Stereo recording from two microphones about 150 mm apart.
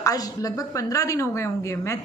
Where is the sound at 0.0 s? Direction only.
25° left (ahead or behind).